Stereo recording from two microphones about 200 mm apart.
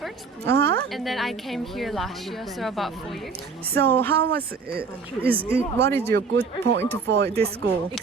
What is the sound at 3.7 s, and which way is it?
Speech, 50° right (ahead or behind).